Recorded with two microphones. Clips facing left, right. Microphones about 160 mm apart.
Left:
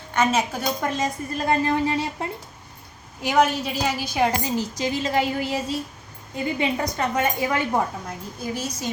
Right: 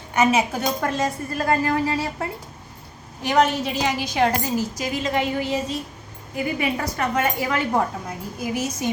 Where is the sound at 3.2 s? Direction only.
5° left (ahead or behind).